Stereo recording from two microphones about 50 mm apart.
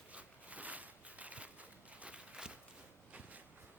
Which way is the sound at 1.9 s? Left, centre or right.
Right.